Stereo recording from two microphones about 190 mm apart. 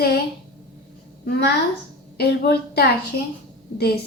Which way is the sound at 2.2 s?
55° left (ahead or behind).